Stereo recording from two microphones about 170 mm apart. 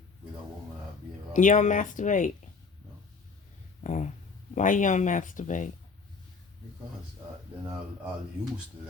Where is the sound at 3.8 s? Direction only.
45° left (ahead or behind).